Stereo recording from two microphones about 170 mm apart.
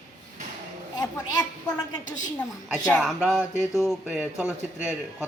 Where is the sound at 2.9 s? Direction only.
Centre (ahead or behind).